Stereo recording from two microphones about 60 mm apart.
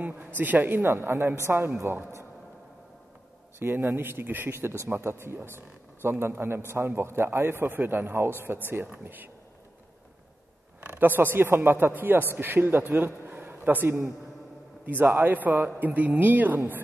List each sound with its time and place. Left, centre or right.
0.0 s speech: right
0.8 s a woman's voice: right
3.5 s a man's voice: right
10.9 s a man's voice: right